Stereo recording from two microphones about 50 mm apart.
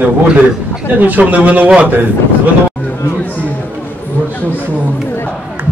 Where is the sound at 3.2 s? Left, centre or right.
Left.